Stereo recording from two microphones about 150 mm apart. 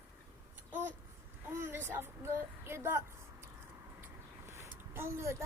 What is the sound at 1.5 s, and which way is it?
A woman's voice, 15° right (ahead or behind).